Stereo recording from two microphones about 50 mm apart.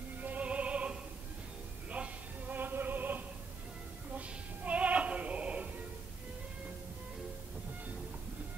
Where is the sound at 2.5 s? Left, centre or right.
Right.